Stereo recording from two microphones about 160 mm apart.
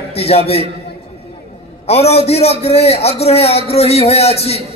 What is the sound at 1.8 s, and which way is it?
A man's voice, 40° left (ahead or behind).